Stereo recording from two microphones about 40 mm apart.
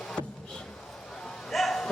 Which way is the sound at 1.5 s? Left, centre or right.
Centre.